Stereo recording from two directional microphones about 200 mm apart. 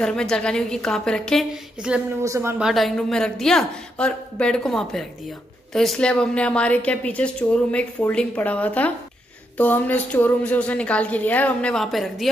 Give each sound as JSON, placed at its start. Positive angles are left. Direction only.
{"t": 0.0, "sound": "a woman's voice", "side_deg": 5}
{"t": 2.2, "sound": "speech", "side_deg": -15}
{"t": 2.6, "sound": "a woman's voice", "side_deg": 0}